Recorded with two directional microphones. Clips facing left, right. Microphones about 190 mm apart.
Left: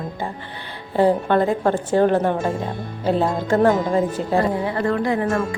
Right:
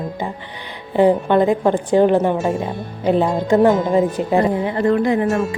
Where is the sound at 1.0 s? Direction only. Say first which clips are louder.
Right 3 dB; 15° right (ahead or behind).